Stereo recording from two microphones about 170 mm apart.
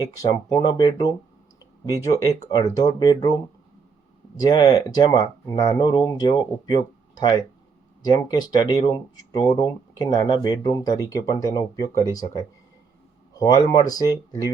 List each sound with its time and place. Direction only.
0.0 s speech: 25° left (ahead or behind)
4.4 s speech: 25° left (ahead or behind)
13.4 s speech: 20° left (ahead or behind)